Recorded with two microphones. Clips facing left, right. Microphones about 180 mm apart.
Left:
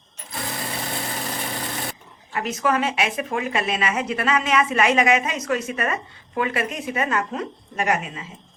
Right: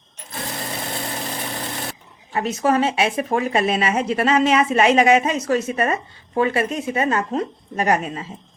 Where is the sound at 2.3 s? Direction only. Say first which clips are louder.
Right 4 dB; 30° right (ahead or behind).